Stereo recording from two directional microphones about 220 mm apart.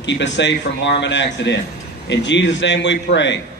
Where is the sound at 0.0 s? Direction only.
55° left (ahead or behind).